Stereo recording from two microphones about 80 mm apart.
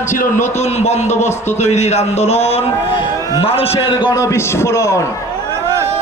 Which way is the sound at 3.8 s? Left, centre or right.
Left.